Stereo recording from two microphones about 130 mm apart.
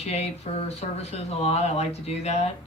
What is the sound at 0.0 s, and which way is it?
Speech, 55° left (ahead or behind).